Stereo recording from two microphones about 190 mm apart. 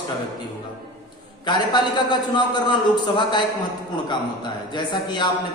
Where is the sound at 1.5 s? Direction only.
25° left (ahead or behind).